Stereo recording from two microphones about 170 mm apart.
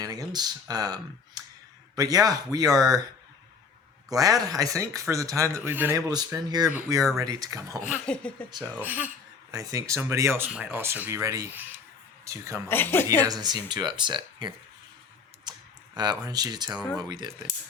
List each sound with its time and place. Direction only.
0.0 s speech: 20° right (ahead or behind)
2.0 s speech: 20° right (ahead or behind)
4.1 s speech: 20° right (ahead or behind)
6.1 s speech: 25° right (ahead or behind)
7.9 s speech: 5° left (ahead or behind)
8.4 s speech: 25° right (ahead or behind)
8.7 s speech: 10° right (ahead or behind)
9.5 s speech: 20° right (ahead or behind)
12.6 s speech: 15° left (ahead or behind)
13.2 s speech: 25° right (ahead or behind)
16.0 s speech: 25° right (ahead or behind)